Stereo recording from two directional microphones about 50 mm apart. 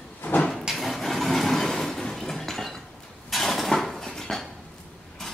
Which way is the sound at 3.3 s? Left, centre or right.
Centre.